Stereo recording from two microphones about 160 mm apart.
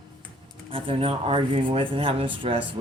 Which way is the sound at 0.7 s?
35° right (ahead or behind).